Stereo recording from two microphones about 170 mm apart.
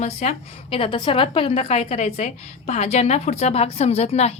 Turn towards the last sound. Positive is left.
turn(degrees=40)  # may be behind; listen again after turning